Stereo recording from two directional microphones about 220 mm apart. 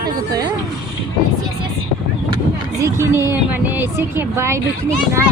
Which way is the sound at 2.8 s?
10° right (ahead or behind).